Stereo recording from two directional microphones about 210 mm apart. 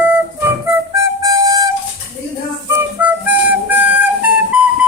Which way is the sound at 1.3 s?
15° right (ahead or behind).